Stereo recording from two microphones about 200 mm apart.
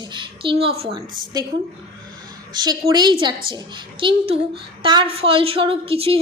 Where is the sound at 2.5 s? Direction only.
20° right (ahead or behind).